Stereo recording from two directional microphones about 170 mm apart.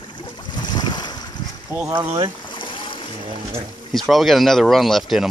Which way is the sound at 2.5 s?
30° left (ahead or behind).